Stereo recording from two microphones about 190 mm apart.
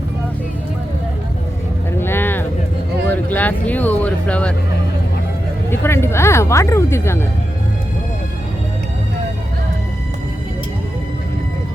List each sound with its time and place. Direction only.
2.0 s vehicle: 10° left (ahead or behind)
3.1 s a sound: 10° left (ahead or behind)
5.7 s speech: 10° left (ahead or behind)